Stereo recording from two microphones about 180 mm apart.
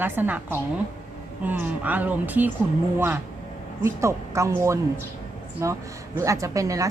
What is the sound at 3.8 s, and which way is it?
Speech, 15° right (ahead or behind).